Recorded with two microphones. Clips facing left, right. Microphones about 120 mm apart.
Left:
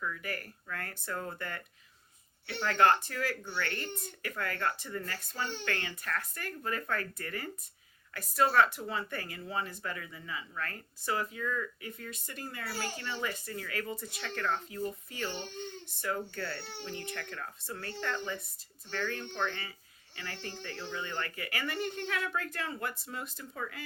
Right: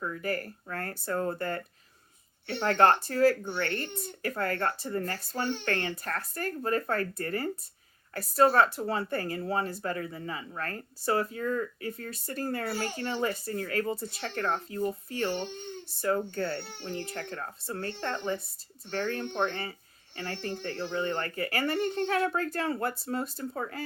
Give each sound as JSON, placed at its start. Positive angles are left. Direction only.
{"t": 0.0, "sound": "speech", "side_deg": -35}